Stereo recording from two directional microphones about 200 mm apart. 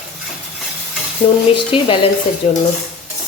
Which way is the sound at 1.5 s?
25° left (ahead or behind).